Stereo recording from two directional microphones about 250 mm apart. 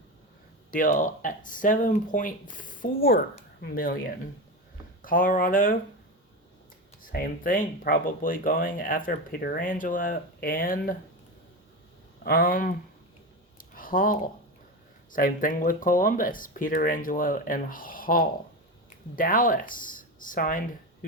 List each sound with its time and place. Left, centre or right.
0.7 s speech: left
5.0 s speech: left
7.0 s speech: left
12.2 s speech: left
13.7 s a sound: left
15.1 s speech: left